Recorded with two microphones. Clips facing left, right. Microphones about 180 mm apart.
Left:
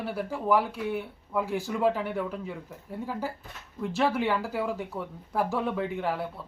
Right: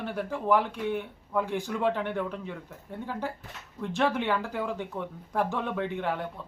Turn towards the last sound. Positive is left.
turn(degrees=5)  # may be behind; listen again after turning